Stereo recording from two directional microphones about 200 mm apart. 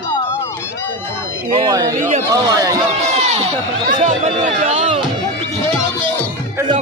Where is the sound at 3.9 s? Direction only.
40° right (ahead or behind).